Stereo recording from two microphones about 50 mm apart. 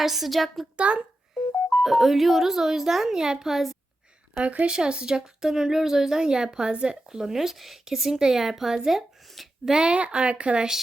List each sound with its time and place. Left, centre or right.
0.0 s speech: centre
0.8 s speech: right
1.8 s speech: centre
4.4 s speech: right; by 9.7 s centre
9.7 s speech: right